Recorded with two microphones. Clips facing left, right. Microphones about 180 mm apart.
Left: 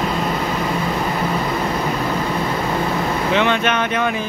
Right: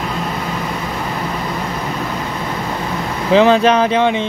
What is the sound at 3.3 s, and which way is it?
Speech, 35° right (ahead or behind).